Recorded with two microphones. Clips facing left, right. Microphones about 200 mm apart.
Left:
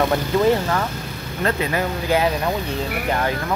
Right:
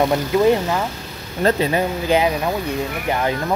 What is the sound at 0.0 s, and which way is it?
Speech, 15° right (ahead or behind).